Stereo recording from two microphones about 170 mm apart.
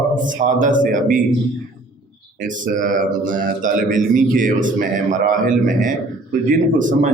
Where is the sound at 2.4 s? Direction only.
50° right (ahead or behind).